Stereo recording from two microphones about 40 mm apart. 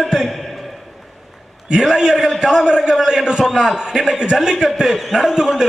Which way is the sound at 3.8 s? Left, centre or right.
Centre.